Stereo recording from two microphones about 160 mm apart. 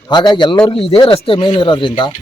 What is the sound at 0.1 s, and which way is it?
A man's voice, 30° left (ahead or behind).